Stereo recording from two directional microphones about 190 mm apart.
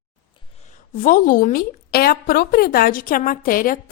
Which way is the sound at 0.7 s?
45° left (ahead or behind).